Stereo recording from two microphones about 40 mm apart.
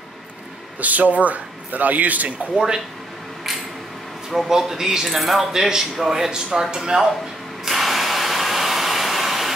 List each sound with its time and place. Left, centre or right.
0.7 s a man's voice: right
2.5 s speech: centre
4.5 s speech: centre
5.1 s speech: centre
5.5 s speech: centre
7.6 s a sound: centre